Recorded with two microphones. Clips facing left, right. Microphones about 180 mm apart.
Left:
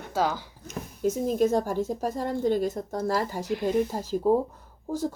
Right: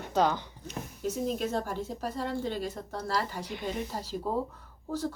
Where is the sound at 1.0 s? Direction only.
45° left (ahead or behind).